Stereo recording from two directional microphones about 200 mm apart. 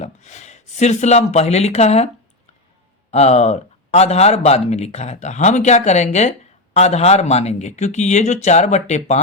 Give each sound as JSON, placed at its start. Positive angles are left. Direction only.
{"t": 0.0, "sound": "speech", "side_deg": 35}
{"t": 3.1, "sound": "speech", "side_deg": 35}